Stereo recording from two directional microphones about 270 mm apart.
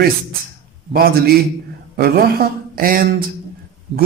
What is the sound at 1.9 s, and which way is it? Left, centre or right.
Speech, right.